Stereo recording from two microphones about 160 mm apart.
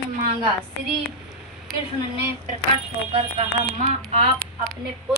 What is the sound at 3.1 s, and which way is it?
Speech, 40° right (ahead or behind).